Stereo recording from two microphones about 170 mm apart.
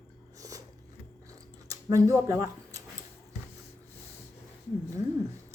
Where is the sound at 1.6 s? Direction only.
20° right (ahead or behind).